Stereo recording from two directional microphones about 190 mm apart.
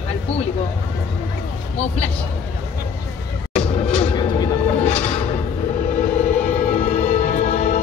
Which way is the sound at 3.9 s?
25° left (ahead or behind).